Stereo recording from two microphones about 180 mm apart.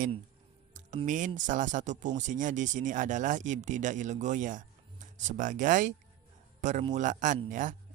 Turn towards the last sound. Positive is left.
turn(degrees=-45)  # may be behind; listen again after turning